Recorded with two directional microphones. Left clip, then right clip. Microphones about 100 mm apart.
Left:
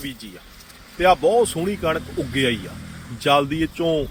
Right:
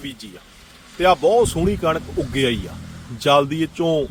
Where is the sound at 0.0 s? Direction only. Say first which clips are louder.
Even; 45° right (ahead or behind).